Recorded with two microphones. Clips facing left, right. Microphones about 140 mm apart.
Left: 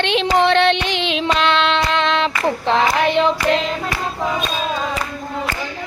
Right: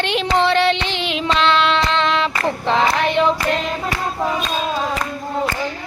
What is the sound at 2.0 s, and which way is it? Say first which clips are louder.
Female singing: even; 20° left (ahead or behind).